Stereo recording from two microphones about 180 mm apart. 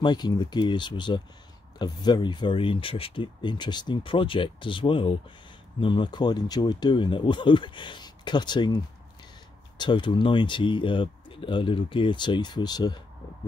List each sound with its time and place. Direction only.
0.0 s speech: 25° left (ahead or behind)
9.8 s speech: 25° left (ahead or behind)